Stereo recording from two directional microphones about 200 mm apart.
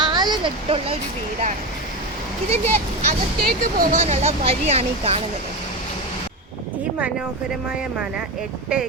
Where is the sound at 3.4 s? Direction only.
45° right (ahead or behind).